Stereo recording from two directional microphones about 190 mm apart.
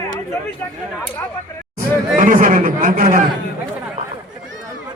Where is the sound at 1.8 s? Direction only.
45° right (ahead or behind).